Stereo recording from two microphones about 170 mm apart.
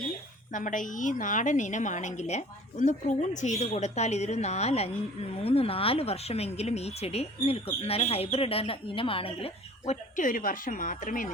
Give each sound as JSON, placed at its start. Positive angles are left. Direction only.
{"t": 0.5, "sound": "a woman's voice", "side_deg": 50}